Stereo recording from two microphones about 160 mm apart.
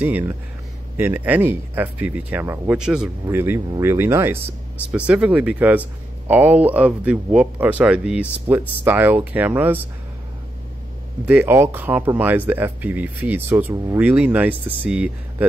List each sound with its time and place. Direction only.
0.0 s speech: 10° right (ahead or behind)
2.8 s speech: 5° right (ahead or behind)
3.3 s speech: 15° right (ahead or behind)
11.2 s speech: 10° right (ahead or behind)